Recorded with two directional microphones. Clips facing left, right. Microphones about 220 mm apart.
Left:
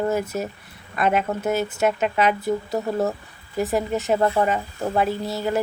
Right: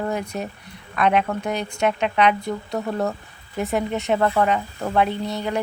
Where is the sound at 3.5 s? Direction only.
Centre (ahead or behind).